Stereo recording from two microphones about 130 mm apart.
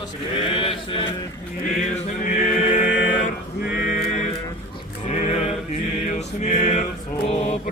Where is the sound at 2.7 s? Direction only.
70° left (ahead or behind).